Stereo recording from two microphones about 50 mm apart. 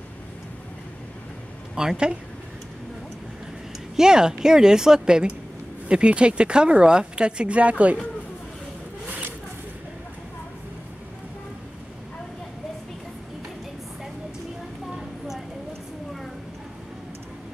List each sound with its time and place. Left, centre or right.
1.8 s a woman's voice: centre
3.9 s a woman's voice: centre